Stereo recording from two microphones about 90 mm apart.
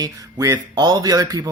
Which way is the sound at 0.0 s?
45° right (ahead or behind).